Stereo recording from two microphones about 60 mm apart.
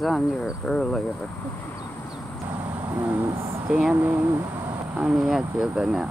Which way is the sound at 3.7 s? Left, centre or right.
Centre.